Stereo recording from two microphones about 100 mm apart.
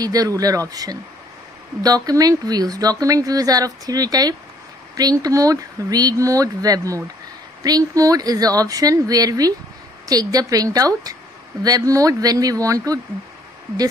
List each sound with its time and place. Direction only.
0.0 s speech: 40° right (ahead or behind)